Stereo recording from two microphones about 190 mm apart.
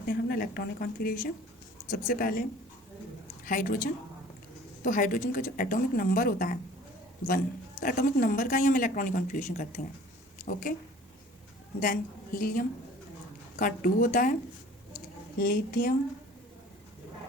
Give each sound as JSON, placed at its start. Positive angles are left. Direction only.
{"t": 0.0, "sound": "a man's voice", "side_deg": 50}
{"t": 3.4, "sound": "a woman's voice", "side_deg": 45}
{"t": 11.8, "sound": "a man's voice", "side_deg": 45}
{"t": 15.4, "sound": "a man's voice", "side_deg": 50}